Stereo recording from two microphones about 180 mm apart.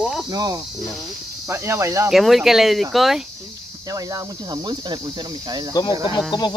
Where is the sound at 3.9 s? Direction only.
20° right (ahead or behind).